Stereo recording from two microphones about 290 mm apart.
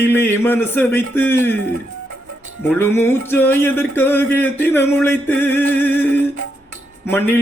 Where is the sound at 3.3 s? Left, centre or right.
Centre.